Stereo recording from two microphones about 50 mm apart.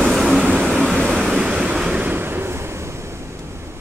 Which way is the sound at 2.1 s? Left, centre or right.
Right.